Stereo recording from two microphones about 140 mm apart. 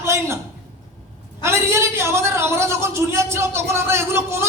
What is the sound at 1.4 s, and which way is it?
A woman's voice, 20° right (ahead or behind).